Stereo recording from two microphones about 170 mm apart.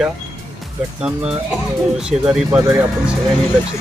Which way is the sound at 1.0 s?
5° right (ahead or behind).